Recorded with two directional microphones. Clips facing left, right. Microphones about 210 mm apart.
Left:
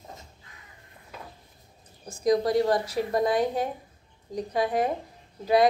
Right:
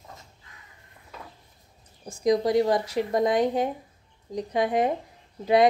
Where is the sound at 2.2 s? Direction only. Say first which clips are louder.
Right 1 dB; 15° right (ahead or behind).